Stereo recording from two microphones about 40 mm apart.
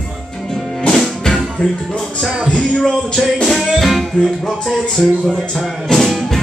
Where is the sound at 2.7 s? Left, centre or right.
Centre.